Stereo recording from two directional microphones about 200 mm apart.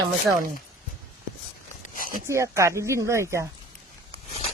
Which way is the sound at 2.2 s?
15° right (ahead or behind).